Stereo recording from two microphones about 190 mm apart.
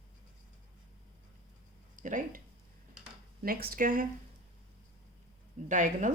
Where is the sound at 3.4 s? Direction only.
50° right (ahead or behind).